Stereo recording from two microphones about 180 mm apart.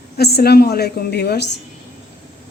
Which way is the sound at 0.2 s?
60° left (ahead or behind).